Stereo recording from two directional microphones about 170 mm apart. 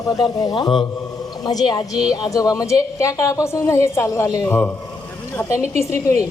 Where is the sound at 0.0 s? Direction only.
20° left (ahead or behind).